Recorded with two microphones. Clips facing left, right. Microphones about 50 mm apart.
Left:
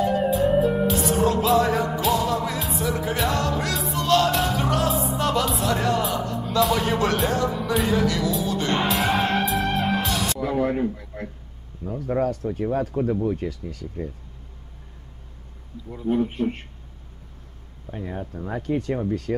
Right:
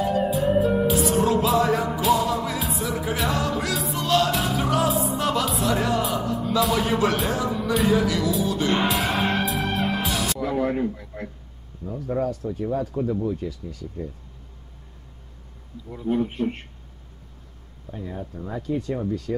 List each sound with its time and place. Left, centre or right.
0.0 s music: centre
11.8 s speech: left
12.2 s speech: left
15.9 s speech: centre
17.9 s speech: left
18.5 s speech: left